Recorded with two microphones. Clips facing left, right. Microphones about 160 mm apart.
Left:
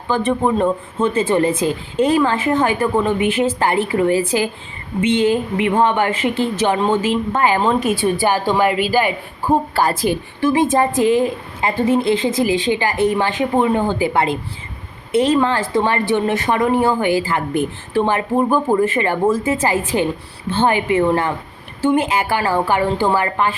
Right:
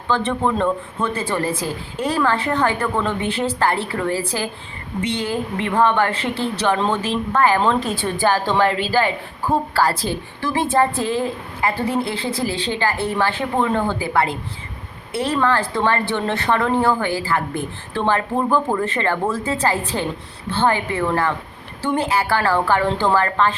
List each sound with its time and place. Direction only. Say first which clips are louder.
0.3 s a woman's voice: left 5 dB; 15° left (ahead or behind)